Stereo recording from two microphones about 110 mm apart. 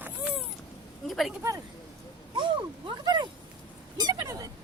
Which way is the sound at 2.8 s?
40° right (ahead or behind).